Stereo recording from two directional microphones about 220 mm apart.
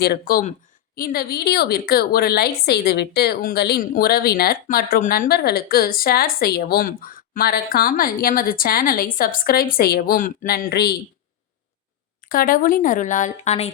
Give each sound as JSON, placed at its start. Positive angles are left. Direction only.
{"t": 0.0, "sound": "a woman's voice", "side_deg": 45}
{"t": 12.3, "sound": "speech", "side_deg": 40}